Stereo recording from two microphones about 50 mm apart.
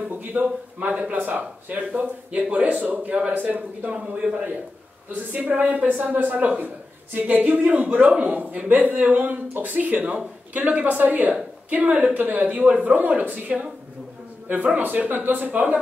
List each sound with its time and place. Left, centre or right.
0.2 s a woman's voice: right
0.8 s a man's voice: right
5.3 s a woman's voice: right